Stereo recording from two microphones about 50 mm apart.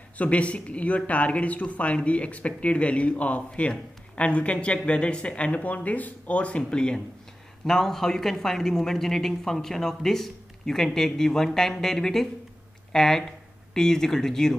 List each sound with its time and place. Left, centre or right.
0.2 s speech: left; by 14.6 s centre